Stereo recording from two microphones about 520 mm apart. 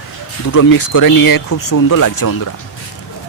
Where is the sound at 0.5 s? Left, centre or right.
Left.